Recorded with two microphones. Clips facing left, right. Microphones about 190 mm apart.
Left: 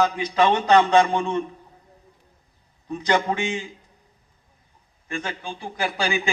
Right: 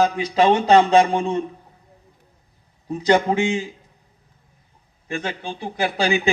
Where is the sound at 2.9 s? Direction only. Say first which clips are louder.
Right 5 dB; 30° right (ahead or behind).